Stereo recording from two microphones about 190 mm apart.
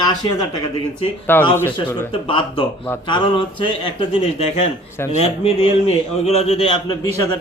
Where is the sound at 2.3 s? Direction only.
30° left (ahead or behind).